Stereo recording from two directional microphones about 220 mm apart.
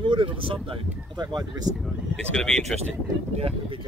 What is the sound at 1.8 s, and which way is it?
Speech, 5° left (ahead or behind).